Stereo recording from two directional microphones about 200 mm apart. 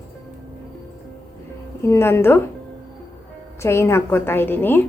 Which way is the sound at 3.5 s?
15° left (ahead or behind).